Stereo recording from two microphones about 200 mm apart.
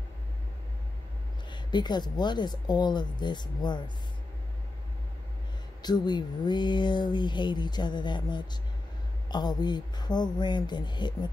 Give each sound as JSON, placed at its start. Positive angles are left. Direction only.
{"t": 1.5, "sound": "speech", "side_deg": 20}
{"t": 5.8, "sound": "speech", "side_deg": 20}